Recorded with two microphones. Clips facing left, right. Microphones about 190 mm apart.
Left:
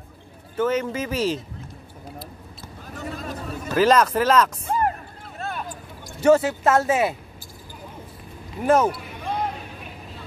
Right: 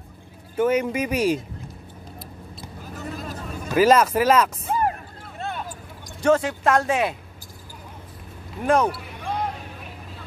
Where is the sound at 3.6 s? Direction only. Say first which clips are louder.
Right 1 dB; 10° right (ahead or behind).